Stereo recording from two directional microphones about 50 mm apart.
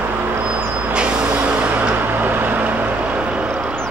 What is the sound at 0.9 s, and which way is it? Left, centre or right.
Vehicle, centre.